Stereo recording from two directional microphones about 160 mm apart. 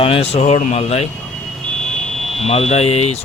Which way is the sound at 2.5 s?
40° left (ahead or behind).